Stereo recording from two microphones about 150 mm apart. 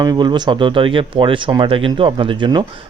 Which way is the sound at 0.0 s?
25° right (ahead or behind).